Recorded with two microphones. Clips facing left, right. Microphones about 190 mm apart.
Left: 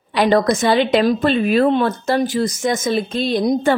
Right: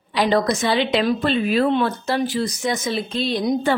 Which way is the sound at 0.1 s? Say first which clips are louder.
Left 4 dB; 55° left (ahead or behind).